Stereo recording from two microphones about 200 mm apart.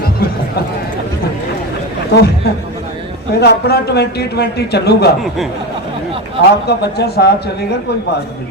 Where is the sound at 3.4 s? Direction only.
55° left (ahead or behind).